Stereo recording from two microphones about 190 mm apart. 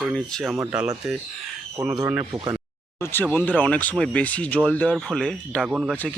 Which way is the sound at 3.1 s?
10° left (ahead or behind).